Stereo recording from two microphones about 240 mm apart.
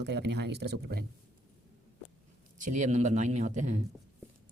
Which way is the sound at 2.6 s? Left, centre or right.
Right.